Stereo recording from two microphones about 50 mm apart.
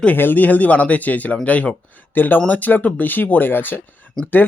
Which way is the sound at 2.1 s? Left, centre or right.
Left.